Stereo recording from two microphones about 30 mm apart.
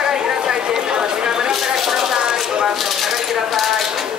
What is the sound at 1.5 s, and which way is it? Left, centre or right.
Chopping, centre.